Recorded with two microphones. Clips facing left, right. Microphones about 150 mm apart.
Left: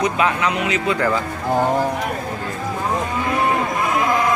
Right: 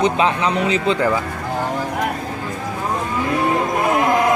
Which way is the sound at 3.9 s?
50° right (ahead or behind).